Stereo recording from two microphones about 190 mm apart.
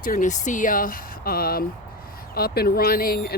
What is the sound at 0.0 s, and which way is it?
Speech, 45° left (ahead or behind).